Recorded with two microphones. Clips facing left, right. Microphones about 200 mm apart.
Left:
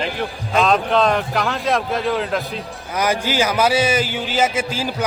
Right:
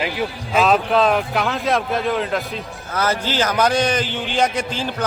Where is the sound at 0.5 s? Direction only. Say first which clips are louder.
Even; 5° right (ahead or behind).